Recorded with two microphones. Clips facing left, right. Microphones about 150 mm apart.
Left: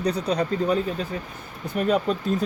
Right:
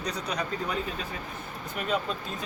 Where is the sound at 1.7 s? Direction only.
45° left (ahead or behind).